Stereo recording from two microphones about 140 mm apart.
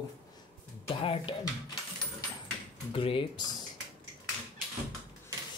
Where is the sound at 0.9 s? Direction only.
40° left (ahead or behind).